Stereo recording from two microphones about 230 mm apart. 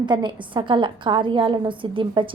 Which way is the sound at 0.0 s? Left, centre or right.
Centre.